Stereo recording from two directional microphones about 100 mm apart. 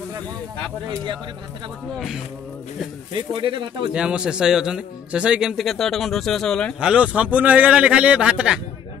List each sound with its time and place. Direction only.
3.1 s speech: 55° right (ahead or behind)
3.9 s a man's voice: 10° right (ahead or behind); by 6.7 s 5° left (ahead or behind)
6.8 s a man's voice: 10° right (ahead or behind)